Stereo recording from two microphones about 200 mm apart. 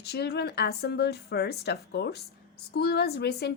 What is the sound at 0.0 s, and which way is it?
A woman's voice, 55° left (ahead or behind).